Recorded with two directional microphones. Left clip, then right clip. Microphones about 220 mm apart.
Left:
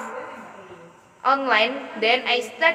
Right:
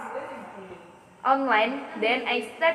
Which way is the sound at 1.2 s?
45° left (ahead or behind).